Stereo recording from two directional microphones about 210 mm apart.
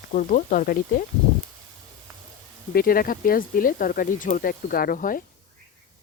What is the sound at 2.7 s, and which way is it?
Speech, 45° left (ahead or behind).